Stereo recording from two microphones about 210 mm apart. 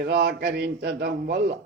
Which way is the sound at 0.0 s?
50° right (ahead or behind).